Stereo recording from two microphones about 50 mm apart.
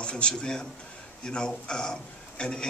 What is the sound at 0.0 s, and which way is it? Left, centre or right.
A man's voice, centre.